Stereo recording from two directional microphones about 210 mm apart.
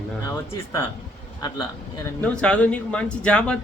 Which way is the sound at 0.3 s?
15° left (ahead or behind).